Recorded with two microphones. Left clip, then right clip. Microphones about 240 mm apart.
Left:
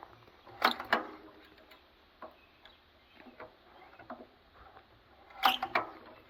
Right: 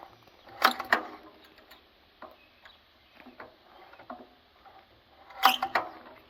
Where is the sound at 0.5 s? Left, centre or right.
Centre.